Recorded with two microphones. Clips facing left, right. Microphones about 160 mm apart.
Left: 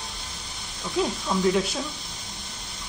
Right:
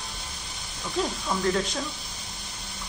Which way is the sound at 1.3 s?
5° left (ahead or behind).